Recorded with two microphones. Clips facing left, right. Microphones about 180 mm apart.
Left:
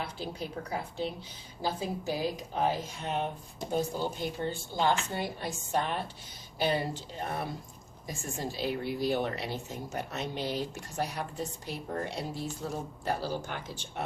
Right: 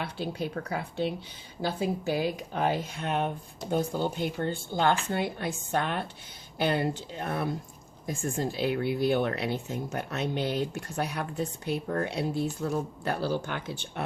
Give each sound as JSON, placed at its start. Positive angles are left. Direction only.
{"t": 0.0, "sound": "speech", "side_deg": -65}